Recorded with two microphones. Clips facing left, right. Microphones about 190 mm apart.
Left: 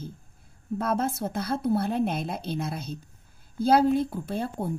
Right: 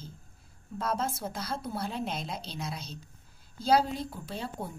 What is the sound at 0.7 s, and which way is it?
A woman's voice, 55° left (ahead or behind).